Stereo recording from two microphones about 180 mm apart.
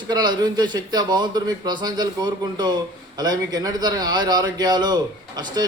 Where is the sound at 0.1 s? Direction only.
25° right (ahead or behind).